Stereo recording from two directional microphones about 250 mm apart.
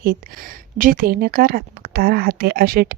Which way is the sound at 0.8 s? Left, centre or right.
Right.